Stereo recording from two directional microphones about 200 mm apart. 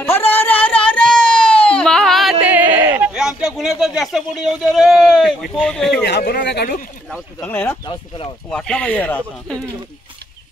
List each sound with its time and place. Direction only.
0.3 s a sound: 10° left (ahead or behind)
6.0 s speech: 55° left (ahead or behind)
7.3 s speech: 10° left (ahead or behind)